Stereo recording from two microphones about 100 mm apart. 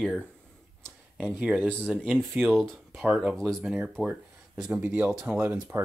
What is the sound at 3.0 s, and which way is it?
Speech, 10° right (ahead or behind).